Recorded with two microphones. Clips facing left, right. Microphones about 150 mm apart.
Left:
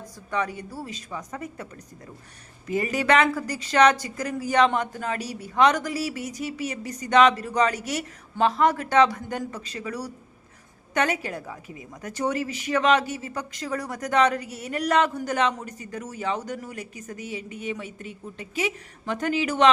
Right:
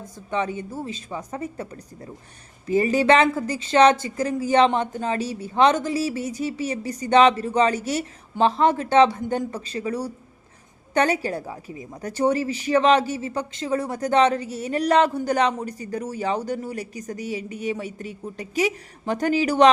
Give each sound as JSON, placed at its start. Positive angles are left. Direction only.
{"t": 0.3, "sound": "speech", "side_deg": -25}